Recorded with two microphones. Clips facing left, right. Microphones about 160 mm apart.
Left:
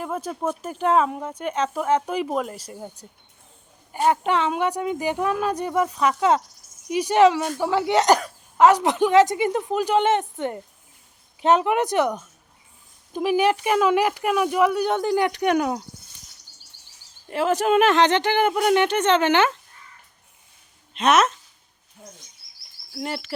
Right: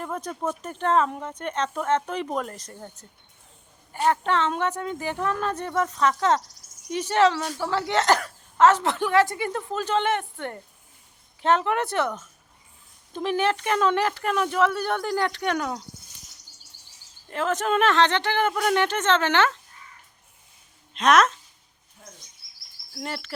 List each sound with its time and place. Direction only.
0.0 s a woman's voice: 5° left (ahead or behind)
3.9 s a woman's voice: 15° left (ahead or behind)
17.2 s a woman's voice: 10° left (ahead or behind)
20.9 s speech: 5° left (ahead or behind)
23.0 s speech: 5° left (ahead or behind)